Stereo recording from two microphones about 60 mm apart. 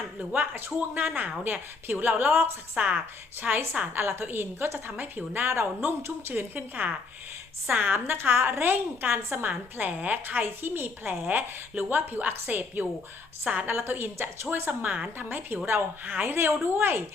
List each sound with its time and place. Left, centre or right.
0.3 s a woman's voice: right
3.4 s a woman's voice: centre
3.9 s a woman's voice: right
13.4 s a woman's voice: centre
13.7 s a woman's voice: right
15.3 s a woman's voice: right